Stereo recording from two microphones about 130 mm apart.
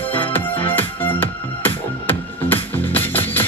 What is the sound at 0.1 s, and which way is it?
Music, 15° left (ahead or behind).